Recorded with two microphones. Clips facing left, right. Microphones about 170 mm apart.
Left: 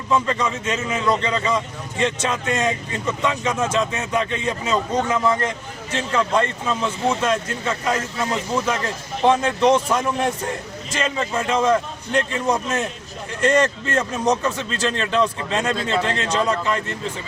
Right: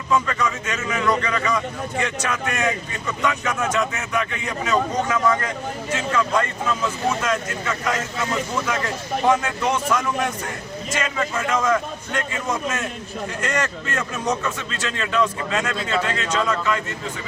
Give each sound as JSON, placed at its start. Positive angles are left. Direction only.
{"t": 0.1, "sound": "a man's voice", "side_deg": 25}